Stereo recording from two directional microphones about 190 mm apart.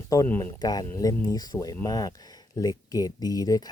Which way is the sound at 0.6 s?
20° left (ahead or behind).